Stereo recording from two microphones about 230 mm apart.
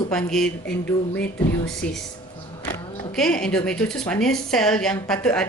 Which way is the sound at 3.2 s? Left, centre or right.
Centre.